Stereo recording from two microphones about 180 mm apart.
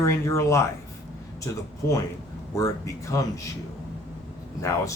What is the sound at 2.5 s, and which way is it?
Speech, 15° left (ahead or behind).